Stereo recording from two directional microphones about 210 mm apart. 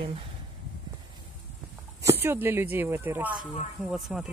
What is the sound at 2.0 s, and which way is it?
Speech, 10° right (ahead or behind).